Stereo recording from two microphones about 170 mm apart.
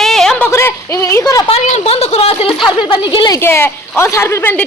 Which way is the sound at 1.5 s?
40° left (ahead or behind).